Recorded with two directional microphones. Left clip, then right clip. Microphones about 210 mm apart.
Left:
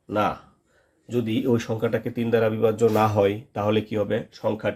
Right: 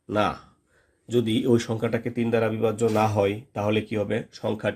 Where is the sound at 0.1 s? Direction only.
25° right (ahead or behind).